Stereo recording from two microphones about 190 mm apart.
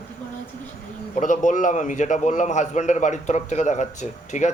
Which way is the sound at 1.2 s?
40° left (ahead or behind).